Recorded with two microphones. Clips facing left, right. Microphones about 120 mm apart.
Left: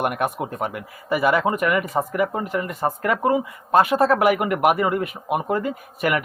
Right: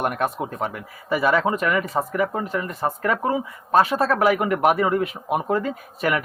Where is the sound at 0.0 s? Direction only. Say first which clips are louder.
Left 1 dB; 15° left (ahead or behind).